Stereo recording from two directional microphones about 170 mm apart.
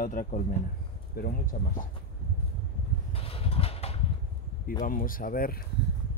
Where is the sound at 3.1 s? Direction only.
35° left (ahead or behind).